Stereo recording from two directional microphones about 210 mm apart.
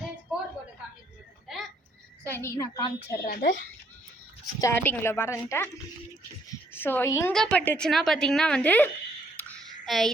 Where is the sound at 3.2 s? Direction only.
55° left (ahead or behind).